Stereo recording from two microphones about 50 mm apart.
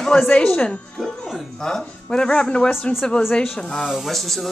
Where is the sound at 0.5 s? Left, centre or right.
Centre.